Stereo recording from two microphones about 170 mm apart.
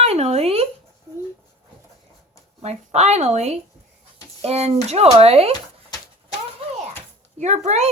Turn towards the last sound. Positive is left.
turn(degrees=-40)  # may be behind; listen again after turning